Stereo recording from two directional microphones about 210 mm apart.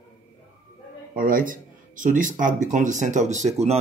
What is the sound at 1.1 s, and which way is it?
Speech, 40° right (ahead or behind).